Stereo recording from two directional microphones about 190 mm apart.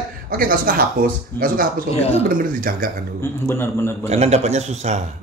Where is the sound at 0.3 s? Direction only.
50° right (ahead or behind).